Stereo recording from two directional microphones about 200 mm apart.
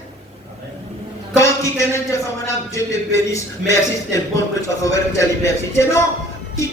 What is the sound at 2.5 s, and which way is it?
A man's voice, 15° left (ahead or behind).